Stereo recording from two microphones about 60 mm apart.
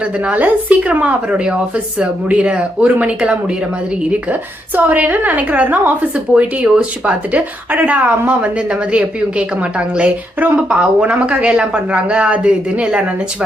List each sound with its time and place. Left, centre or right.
0.0 s a woman's voice: right